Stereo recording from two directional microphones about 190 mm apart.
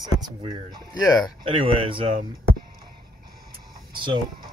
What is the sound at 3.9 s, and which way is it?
Speech, 25° right (ahead or behind).